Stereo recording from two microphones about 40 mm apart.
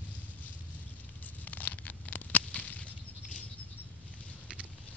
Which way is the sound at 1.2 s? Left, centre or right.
Left.